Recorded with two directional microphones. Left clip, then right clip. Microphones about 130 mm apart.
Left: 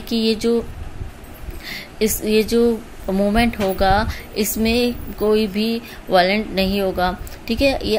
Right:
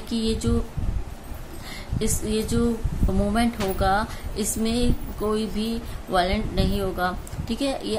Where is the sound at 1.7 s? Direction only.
40° left (ahead or behind).